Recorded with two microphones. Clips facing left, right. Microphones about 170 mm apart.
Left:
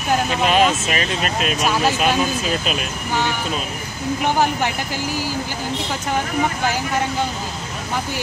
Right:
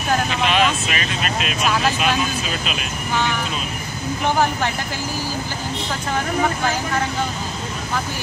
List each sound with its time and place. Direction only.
0.5 s speech: 40° left (ahead or behind)